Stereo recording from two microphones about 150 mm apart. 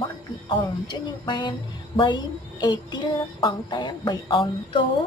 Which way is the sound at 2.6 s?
30° left (ahead or behind).